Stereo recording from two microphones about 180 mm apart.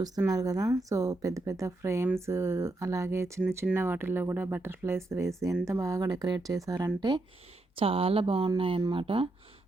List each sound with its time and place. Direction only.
0.3 s speech: 20° right (ahead or behind)